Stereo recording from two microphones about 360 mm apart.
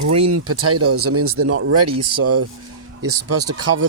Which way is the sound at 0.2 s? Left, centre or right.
Right.